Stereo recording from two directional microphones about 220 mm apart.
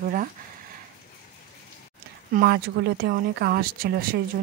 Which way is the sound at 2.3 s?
40° right (ahead or behind).